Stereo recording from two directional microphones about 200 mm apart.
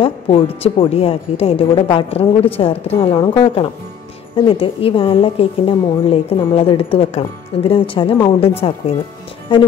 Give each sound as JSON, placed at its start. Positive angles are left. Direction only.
{"t": 0.0, "sound": "a woman's voice", "side_deg": 25}